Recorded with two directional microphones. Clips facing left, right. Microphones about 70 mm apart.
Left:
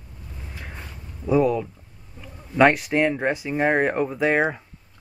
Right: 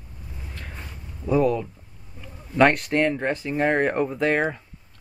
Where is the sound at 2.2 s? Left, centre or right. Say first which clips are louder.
Left 1 dB; centre.